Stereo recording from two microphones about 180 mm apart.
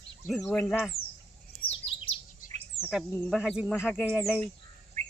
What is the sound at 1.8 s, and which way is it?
Chirp, 30° left (ahead or behind).